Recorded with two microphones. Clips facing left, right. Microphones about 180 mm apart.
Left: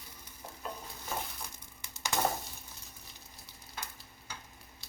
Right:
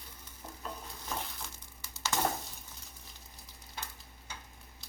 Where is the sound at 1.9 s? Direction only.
15° left (ahead or behind).